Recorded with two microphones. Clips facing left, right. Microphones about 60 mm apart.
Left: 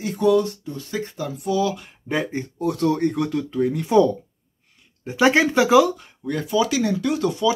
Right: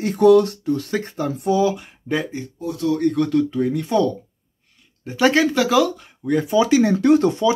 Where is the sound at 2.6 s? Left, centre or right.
Left.